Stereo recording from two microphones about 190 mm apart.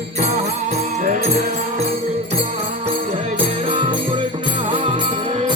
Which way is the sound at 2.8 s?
30° right (ahead or behind).